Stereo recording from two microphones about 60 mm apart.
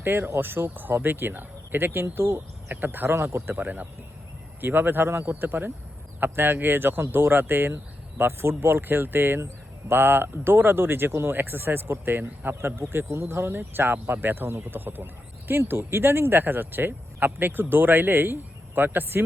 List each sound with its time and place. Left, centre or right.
0.0 s speech: right
3.2 s speech: right